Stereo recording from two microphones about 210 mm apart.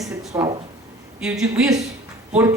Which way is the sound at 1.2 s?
5° right (ahead or behind).